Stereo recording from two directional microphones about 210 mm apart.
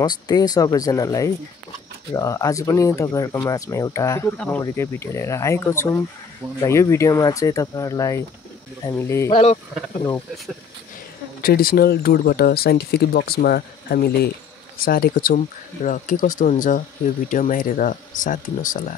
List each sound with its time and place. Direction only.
0.0 s speech: 20° left (ahead or behind)
9.3 s speech: 30° left (ahead or behind)
11.4 s speech: 45° left (ahead or behind)